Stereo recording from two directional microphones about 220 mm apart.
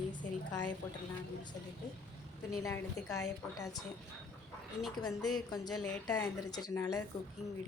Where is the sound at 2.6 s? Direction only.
15° left (ahead or behind).